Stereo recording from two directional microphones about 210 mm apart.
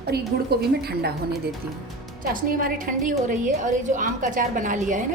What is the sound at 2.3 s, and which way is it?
A woman's voice, 40° right (ahead or behind).